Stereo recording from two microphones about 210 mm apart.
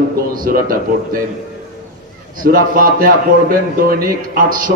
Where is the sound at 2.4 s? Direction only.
40° right (ahead or behind).